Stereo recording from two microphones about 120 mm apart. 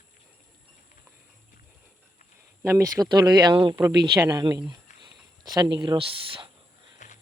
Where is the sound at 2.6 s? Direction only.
20° right (ahead or behind).